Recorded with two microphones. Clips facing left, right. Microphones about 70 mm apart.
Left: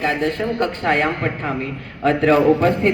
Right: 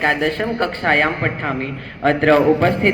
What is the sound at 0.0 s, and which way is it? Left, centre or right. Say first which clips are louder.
A man's voice: right 2 dB; right.